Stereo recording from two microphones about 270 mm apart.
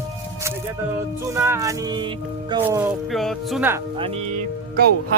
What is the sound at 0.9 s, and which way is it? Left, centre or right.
Speech, centre.